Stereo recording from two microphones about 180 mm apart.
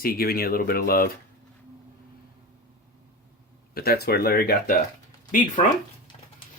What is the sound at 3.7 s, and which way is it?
Speech, 60° left (ahead or behind).